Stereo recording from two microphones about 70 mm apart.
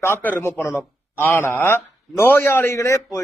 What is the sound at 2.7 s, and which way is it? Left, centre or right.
Speech, left.